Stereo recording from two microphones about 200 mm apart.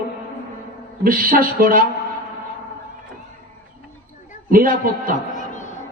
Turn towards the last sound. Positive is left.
turn(degrees=-45)  # may be behind; listen again after turning